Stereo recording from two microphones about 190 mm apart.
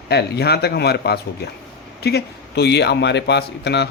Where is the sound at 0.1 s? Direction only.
60° left (ahead or behind).